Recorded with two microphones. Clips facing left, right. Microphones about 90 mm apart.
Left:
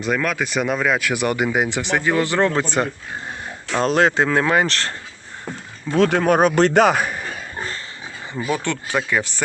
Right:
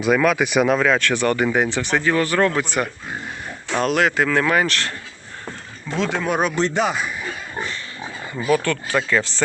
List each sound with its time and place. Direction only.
0.0 s speech: 5° right (ahead or behind)
0.6 s speech: 5° left (ahead or behind); by 4.9 s 35° left (ahead or behind)
6.0 s speech: 55° left (ahead or behind)
8.4 s speech: 20° left (ahead or behind)